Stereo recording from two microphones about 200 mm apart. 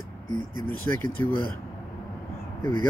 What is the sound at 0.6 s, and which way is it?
Speech, 10° left (ahead or behind).